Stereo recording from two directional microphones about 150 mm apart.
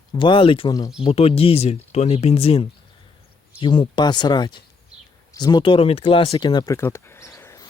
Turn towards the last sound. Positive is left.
turn(degrees=20)  # may be behind; listen again after turning